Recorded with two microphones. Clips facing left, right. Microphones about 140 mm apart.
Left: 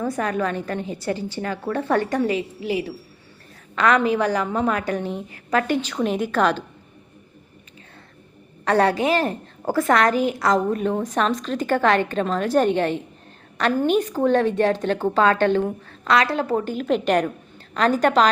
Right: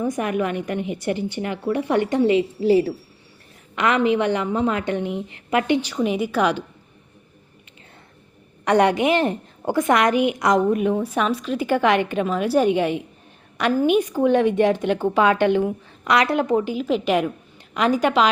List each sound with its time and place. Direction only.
0.0 s a woman's voice: 20° right (ahead or behind)
2.6 s a woman's voice: 40° right (ahead or behind)
3.8 s a woman's voice: 20° right (ahead or behind)
8.6 s a woman's voice: 20° right (ahead or behind)